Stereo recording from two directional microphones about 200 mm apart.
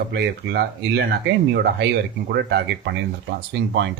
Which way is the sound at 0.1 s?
55° right (ahead or behind).